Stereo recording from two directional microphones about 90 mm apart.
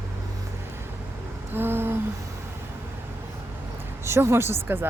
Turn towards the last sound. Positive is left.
turn(degrees=-25)  # may be behind; listen again after turning